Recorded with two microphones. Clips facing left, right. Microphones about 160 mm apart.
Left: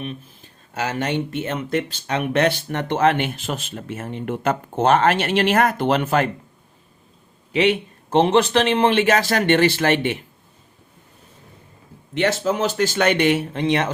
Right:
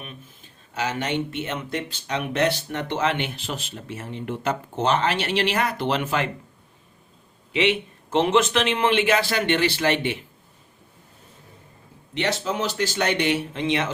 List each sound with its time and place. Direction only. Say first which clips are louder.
0.8 s speech: left 2 dB; 45° left (ahead or behind)
7.5 s speech: left 4 dB; 40° left (ahead or behind)
12.1 s speech: left 5 dB; 50° left (ahead or behind)